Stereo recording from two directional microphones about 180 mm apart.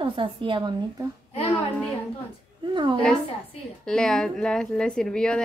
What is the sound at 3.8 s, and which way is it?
A child's voice, 5° left (ahead or behind).